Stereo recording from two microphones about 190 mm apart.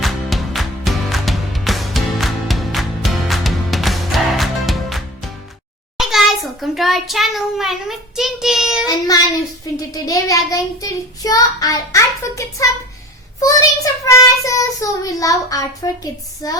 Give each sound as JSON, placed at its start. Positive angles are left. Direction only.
{"t": 0.0, "sound": "music", "side_deg": 0}
{"t": 6.0, "sound": "a child's voice", "side_deg": 0}
{"t": 9.7, "sound": "child singing", "side_deg": 20}
{"t": 16.4, "sound": "speech", "side_deg": 20}